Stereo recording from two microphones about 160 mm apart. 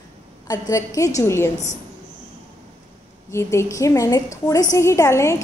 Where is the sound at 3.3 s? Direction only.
15° left (ahead or behind).